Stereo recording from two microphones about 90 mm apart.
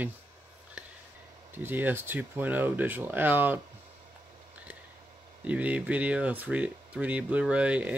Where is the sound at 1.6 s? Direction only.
20° right (ahead or behind).